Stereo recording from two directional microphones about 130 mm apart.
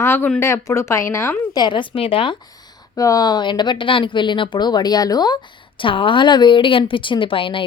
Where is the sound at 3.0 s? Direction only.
25° left (ahead or behind); by 7.7 s 45° left (ahead or behind).